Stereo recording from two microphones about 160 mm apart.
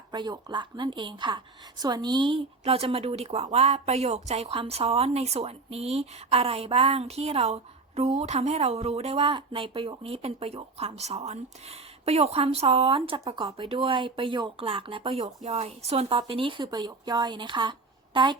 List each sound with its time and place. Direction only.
0.1 s a woman's voice: 25° right (ahead or behind)